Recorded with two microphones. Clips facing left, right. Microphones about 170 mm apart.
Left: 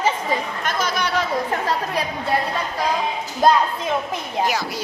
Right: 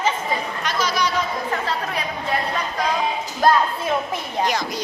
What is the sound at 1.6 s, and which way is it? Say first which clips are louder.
Speech: left 3 dB; 35° left (ahead or behind).